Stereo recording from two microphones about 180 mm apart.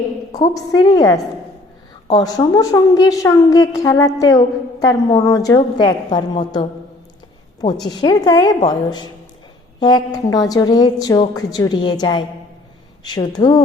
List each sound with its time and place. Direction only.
0.3 s a woman's voice: 20° left (ahead or behind)